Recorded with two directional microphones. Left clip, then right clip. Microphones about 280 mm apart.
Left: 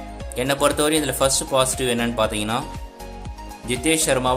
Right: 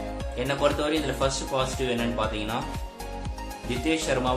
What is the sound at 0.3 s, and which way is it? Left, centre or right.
Speech, left.